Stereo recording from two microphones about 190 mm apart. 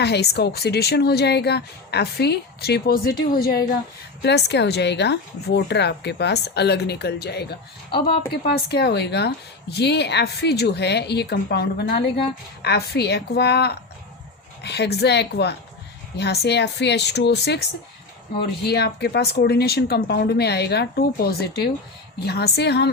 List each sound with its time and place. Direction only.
0.0 s a woman's voice: 60° left (ahead or behind)
18.6 s a woman's voice: 60° left (ahead or behind)